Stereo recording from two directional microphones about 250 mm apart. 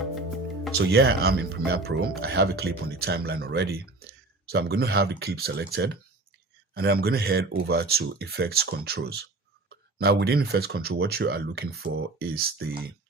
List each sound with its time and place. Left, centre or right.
0.8 s speech: right